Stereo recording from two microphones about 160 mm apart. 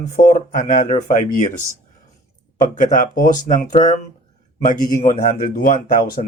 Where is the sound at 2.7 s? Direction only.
55° left (ahead or behind).